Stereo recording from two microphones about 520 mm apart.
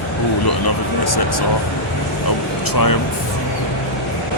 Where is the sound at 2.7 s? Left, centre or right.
Left.